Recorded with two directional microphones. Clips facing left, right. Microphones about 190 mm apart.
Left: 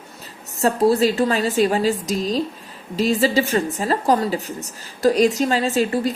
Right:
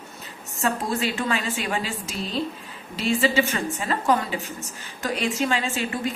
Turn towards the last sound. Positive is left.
turn(degrees=35)  # may be behind; listen again after turning